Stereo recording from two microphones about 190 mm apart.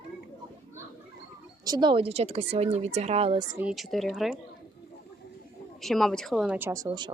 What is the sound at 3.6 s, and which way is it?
Speech, centre (ahead or behind).